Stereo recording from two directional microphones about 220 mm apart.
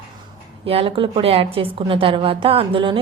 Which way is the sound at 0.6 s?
25° right (ahead or behind).